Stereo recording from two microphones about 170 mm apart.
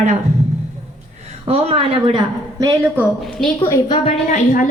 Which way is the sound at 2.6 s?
20° right (ahead or behind).